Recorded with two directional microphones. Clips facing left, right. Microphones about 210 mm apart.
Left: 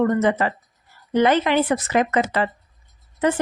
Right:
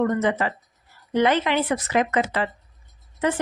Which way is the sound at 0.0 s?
45° left (ahead or behind).